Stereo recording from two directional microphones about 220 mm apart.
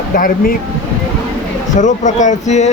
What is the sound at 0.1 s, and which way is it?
Speech, 40° left (ahead or behind).